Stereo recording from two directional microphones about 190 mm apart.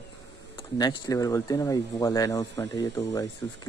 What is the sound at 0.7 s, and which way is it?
Speech, 20° left (ahead or behind).